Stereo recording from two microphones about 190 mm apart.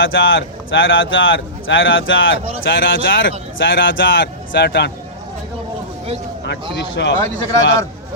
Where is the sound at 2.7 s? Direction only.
65° left (ahead or behind).